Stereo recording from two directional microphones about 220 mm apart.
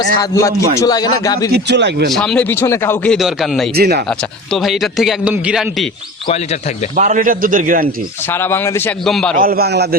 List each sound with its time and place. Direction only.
0.2 s a man's voice: 15° left (ahead or behind)
1.5 s a man's voice: 50° right (ahead or behind)
2.1 s speech: 5° left (ahead or behind)
3.8 s a man's voice: 45° right (ahead or behind)
4.5 s speech: centre (ahead or behind)
6.9 s a man's voice: 35° right (ahead or behind)
8.3 s a man's voice: 10° left (ahead or behind)
9.4 s a man's voice: 45° right (ahead or behind)